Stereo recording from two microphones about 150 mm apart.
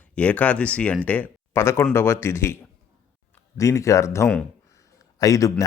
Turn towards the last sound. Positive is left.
turn(degrees=20)  # may be behind; listen again after turning